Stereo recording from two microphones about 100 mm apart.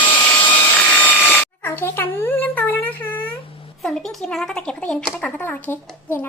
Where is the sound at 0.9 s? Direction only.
15° left (ahead or behind).